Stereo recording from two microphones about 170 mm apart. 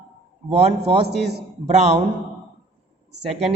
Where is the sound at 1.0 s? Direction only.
75° right (ahead or behind).